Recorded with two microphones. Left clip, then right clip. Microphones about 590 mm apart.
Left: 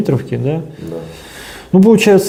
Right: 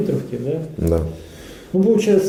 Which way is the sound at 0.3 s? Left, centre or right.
Left.